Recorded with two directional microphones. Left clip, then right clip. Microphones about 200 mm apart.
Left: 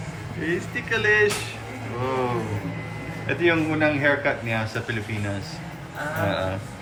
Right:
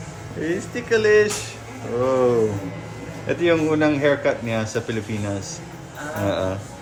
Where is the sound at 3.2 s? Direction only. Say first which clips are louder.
Right 3 dB; 45° right (ahead or behind).